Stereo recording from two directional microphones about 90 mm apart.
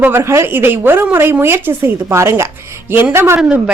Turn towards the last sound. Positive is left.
turn(degrees=-30)  # may be behind; listen again after turning